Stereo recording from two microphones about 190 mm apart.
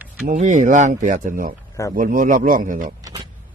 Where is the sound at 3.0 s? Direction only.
20° right (ahead or behind).